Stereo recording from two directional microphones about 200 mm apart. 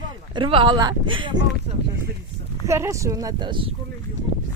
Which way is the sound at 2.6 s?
15° right (ahead or behind).